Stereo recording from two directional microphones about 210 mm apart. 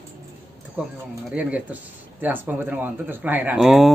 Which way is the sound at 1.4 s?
5° right (ahead or behind).